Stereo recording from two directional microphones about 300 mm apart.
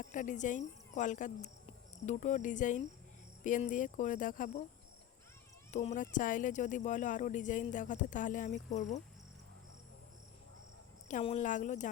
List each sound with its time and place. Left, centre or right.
0.0 s speech: left
5.7 s speech: left
11.1 s speech: left